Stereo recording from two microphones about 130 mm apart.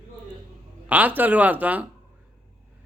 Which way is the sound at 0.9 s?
15° right (ahead or behind).